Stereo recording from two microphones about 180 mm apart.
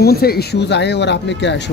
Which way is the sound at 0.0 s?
60° left (ahead or behind).